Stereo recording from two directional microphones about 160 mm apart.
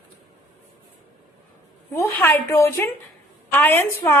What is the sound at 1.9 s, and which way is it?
A woman's voice, 10° left (ahead or behind).